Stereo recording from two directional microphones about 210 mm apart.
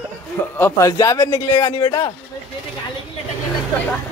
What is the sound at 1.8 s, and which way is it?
Speech, 20° left (ahead or behind).